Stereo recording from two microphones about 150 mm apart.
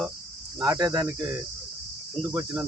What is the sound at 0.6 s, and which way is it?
Speech, 25° right (ahead or behind).